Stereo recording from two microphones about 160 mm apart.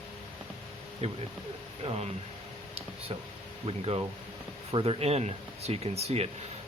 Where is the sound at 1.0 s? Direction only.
40° right (ahead or behind).